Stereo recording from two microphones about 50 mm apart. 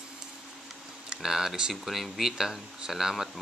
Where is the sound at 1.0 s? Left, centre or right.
Centre.